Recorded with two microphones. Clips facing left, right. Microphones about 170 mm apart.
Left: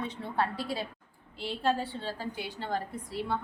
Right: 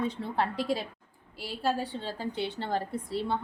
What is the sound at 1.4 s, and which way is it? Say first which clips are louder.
A woman's voice: left 1 dB; 10° right (ahead or behind).